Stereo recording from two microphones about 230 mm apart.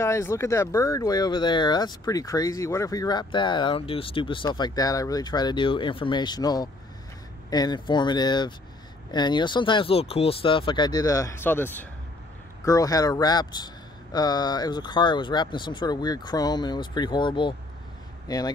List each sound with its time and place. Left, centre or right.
0.0 s speech: centre